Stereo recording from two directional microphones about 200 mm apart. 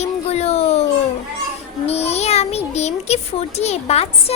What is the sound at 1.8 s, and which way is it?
A child's voice, 30° left (ahead or behind).